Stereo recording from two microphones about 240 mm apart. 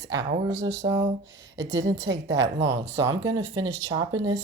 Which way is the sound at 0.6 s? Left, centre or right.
Centre.